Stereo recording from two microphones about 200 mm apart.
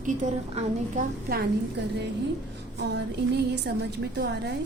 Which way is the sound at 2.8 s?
60° right (ahead or behind).